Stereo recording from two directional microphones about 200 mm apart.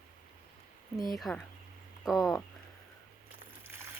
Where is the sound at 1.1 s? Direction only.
Centre (ahead or behind).